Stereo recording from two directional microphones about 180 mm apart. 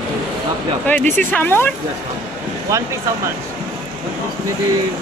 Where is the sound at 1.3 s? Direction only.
10° left (ahead or behind).